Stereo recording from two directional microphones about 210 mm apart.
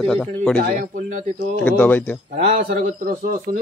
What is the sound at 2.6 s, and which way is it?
Speech, 40° right (ahead or behind).